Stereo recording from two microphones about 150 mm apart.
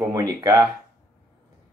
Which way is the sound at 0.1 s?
25° right (ahead or behind).